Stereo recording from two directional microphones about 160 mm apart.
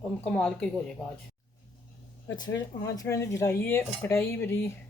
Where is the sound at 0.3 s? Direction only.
5° left (ahead or behind).